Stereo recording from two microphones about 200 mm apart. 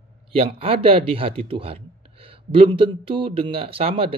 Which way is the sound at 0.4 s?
30° right (ahead or behind).